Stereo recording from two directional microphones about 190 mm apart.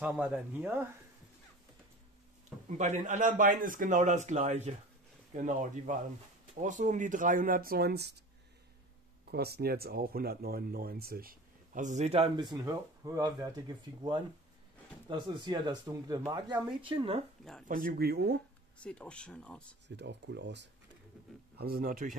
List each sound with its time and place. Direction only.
0.0 s speech: 5° right (ahead or behind)
2.8 s a man's voice: 40° right (ahead or behind); by 8.2 s 60° right (ahead or behind)
9.3 s speech: 55° right (ahead or behind); by 17.2 s 30° right (ahead or behind)
17.6 s speech: 45° right (ahead or behind)
18.8 s speech: 5° left (ahead or behind)
20.0 s speech: 65° right (ahead or behind)
21.5 s speech: 50° right (ahead or behind)